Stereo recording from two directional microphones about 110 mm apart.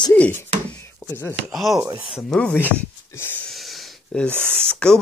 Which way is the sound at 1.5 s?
Centre (ahead or behind).